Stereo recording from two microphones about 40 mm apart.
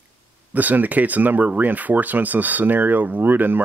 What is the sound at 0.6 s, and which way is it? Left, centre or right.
Speech, right.